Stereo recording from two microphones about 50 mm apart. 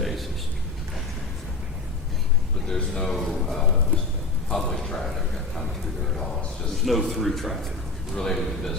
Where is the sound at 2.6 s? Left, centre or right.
Centre.